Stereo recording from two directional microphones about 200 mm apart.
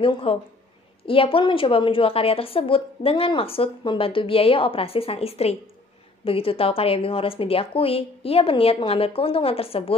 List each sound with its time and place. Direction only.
0.0 s a woman's voice: 25° left (ahead or behind)